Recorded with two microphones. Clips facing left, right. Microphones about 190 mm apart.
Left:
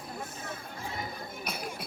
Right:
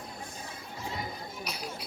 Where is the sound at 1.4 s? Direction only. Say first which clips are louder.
Left 2 dB; 50° left (ahead or behind).